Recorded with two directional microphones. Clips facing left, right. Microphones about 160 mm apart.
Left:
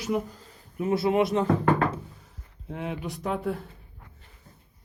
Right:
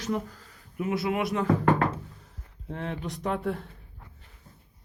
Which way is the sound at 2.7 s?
10° left (ahead or behind).